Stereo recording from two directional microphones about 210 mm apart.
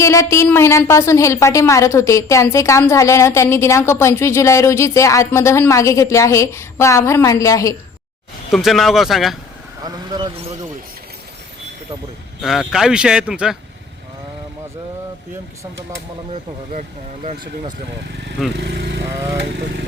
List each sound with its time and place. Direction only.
0.0 s a woman's voice: 15° left (ahead or behind)
8.5 s speech: centre (ahead or behind)
9.8 s speech: 20° right (ahead or behind)
12.4 s speech: centre (ahead or behind)
18.5 s speech: 55° right (ahead or behind)